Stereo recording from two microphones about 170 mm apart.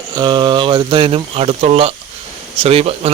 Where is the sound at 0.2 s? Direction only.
25° right (ahead or behind).